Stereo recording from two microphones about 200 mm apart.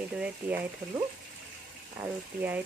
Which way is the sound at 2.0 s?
10° right (ahead or behind).